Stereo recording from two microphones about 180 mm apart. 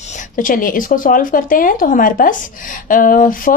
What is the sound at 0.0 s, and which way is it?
A woman's voice, 40° left (ahead or behind).